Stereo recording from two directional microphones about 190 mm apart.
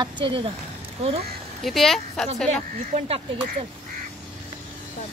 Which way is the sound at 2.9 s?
35° right (ahead or behind).